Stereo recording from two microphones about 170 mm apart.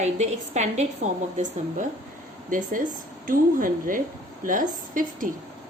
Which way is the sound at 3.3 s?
55° right (ahead or behind).